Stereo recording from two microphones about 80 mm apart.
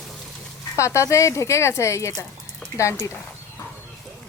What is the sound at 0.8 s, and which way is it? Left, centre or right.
Speech, left.